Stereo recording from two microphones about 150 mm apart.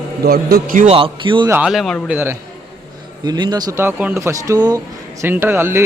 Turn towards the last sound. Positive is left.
turn(degrees=-15)  # may be behind; listen again after turning